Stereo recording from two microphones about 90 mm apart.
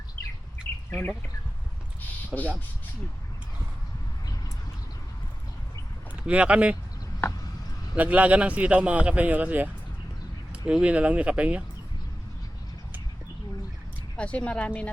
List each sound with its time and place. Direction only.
2.3 s speech: 10° right (ahead or behind)
6.1 s speech: 15° right (ahead or behind)
7.9 s speech: 15° right (ahead or behind)
10.7 s speech: 10° right (ahead or behind)
14.2 s speech: 15° left (ahead or behind)